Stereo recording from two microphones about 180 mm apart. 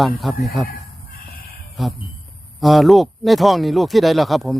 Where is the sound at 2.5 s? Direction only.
Centre (ahead or behind).